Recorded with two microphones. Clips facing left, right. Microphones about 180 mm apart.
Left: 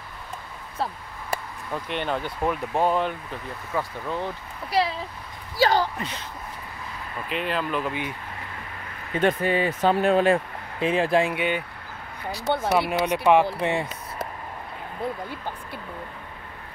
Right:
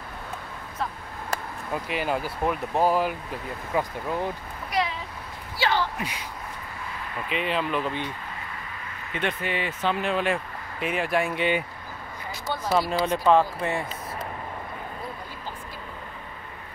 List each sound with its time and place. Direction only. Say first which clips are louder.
1.7 s speech: even; 5° right (ahead or behind)
4.6 s a sound: left 3 dB; 30° left (ahead or behind)
5.9 s speech: even; 10° right (ahead or behind)
7.2 s speech: even; centre (ahead or behind)
9.1 s speech: left 7 dB; 40° left (ahead or behind)
12.6 s speech: right 1 dB; 65° left (ahead or behind)
13.2 s speech: left 2 dB; 15° left (ahead or behind)